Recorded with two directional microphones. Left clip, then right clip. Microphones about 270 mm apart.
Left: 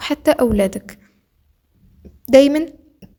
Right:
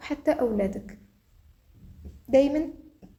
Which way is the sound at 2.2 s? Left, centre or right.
Left.